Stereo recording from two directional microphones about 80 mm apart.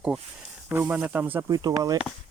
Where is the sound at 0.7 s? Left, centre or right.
Right.